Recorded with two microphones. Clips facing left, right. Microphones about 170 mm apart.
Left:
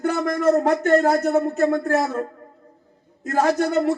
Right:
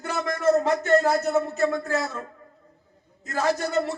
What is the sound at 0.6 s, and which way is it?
Speech, 50° left (ahead or behind).